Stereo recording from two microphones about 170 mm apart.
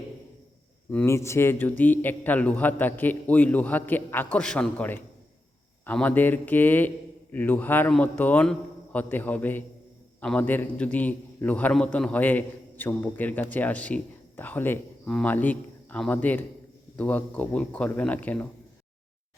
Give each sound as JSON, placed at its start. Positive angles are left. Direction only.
{"t": 0.9, "sound": "a man's voice", "side_deg": 10}